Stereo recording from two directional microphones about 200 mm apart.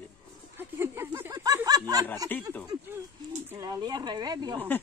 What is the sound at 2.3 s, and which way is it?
Speech, 10° left (ahead or behind).